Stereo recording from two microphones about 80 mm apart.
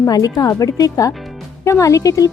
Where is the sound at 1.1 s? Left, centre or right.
Centre.